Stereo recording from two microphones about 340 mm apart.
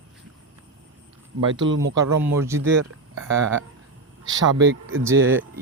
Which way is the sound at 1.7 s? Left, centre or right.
Right.